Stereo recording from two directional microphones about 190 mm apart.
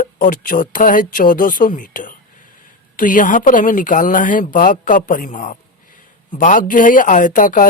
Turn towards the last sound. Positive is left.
turn(degrees=45)  # may be behind; listen again after turning